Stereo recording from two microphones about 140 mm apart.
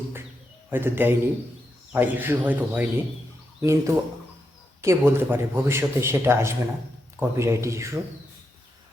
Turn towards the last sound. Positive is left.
turn(degrees=-20)  # may be behind; listen again after turning